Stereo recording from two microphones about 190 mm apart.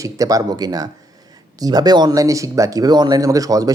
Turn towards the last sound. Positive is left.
turn(degrees=-20)  # may be behind; listen again after turning